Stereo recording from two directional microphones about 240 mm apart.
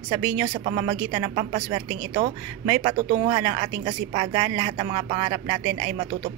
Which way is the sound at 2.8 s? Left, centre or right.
Right.